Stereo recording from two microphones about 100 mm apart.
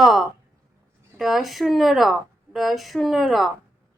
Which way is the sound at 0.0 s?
Centre (ahead or behind).